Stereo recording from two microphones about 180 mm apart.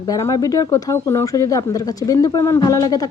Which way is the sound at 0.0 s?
20° left (ahead or behind).